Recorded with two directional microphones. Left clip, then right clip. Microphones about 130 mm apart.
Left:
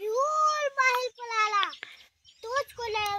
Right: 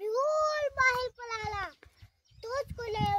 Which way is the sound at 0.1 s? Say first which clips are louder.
Left 3 dB; 45° right (ahead or behind).